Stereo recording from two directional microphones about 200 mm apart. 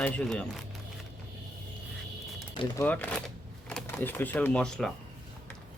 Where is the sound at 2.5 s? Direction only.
25° left (ahead or behind).